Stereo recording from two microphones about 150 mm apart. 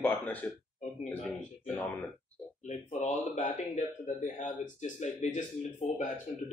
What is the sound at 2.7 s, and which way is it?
Speech, 50° left (ahead or behind).